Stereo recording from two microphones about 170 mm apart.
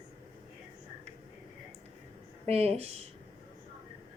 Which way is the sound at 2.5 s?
35° right (ahead or behind).